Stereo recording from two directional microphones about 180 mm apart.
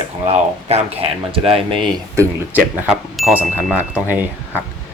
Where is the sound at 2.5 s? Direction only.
10° right (ahead or behind).